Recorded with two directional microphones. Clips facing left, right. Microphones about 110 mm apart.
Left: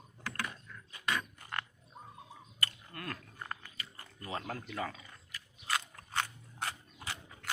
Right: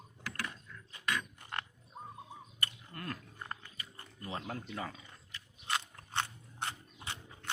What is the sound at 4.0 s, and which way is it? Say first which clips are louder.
Speech: left 1 dB; 20° right (ahead or behind).